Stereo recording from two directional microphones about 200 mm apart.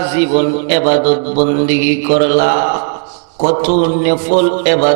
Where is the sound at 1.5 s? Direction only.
20° right (ahead or behind).